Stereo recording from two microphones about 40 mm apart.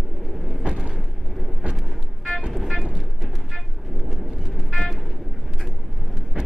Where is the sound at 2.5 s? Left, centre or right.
Centre.